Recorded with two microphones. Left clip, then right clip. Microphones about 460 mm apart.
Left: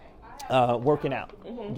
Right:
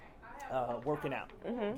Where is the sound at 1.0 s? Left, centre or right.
Left.